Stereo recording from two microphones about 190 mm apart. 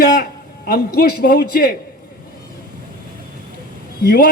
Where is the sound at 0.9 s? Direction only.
50° left (ahead or behind).